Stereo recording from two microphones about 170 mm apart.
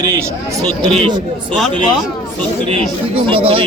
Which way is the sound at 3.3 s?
35° right (ahead or behind).